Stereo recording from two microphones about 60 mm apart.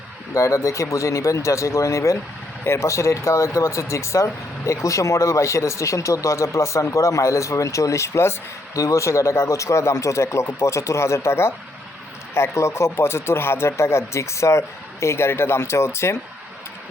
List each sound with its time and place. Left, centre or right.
0.3 s speech: left
8.7 s speech: left